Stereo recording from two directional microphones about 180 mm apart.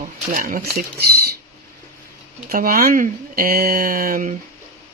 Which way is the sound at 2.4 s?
55° right (ahead or behind).